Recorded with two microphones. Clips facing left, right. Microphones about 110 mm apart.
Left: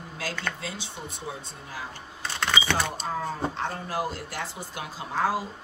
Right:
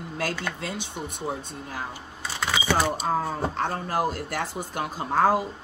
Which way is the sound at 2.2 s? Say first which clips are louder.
Right 1 dB; 5° right (ahead or behind).